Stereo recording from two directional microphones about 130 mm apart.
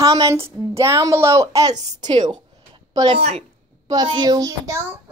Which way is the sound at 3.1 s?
55° right (ahead or behind).